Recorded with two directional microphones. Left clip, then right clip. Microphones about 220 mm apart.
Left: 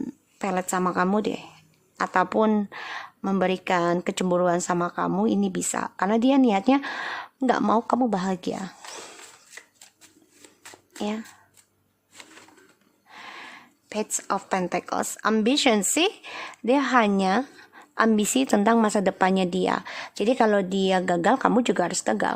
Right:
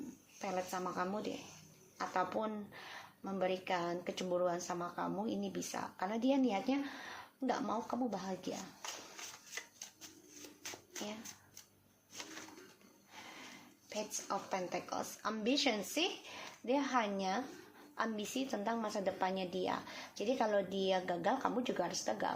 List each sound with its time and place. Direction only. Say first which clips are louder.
0.3 s a woman's voice: left 13 dB; 45° left (ahead or behind)
10.4 s a sound: left 3 dB; 15° left (ahead or behind)
14.3 s a woman's voice: left 14 dB; 45° left (ahead or behind)